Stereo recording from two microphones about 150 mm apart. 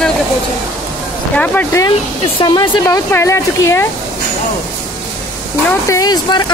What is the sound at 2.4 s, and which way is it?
Speech, 30° left (ahead or behind).